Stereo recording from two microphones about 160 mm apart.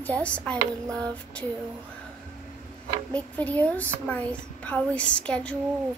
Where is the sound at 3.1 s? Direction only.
10° left (ahead or behind).